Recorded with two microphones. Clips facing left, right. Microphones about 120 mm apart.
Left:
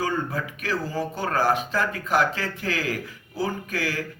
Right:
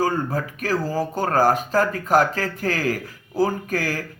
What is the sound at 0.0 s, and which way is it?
Speech, 40° right (ahead or behind).